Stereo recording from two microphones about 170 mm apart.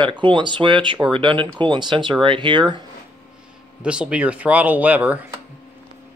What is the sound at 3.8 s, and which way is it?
Speech, 5° right (ahead or behind).